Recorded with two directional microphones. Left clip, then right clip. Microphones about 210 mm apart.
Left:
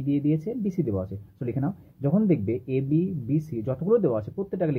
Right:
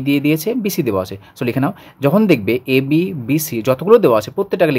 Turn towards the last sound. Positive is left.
turn(degrees=-35)  # may be behind; listen again after turning